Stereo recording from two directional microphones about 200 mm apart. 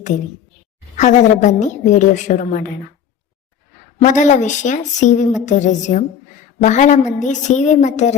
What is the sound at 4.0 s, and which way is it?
A woman's voice, 40° left (ahead or behind).